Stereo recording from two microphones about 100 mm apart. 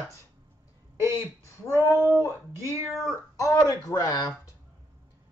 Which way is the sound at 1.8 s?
25° right (ahead or behind).